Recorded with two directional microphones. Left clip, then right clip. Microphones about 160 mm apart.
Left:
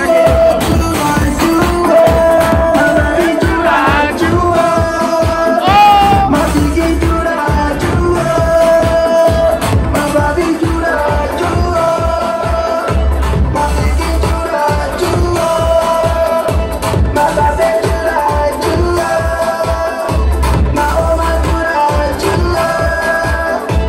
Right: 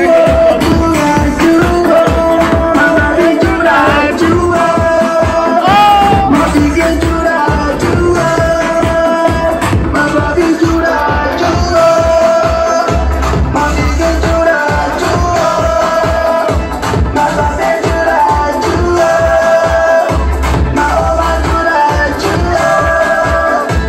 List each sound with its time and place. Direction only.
5.7 s music: 30° left (ahead or behind)